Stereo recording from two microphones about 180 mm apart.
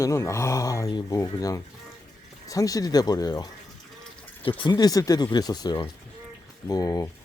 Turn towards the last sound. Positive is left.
turn(degrees=20)  # may be behind; listen again after turning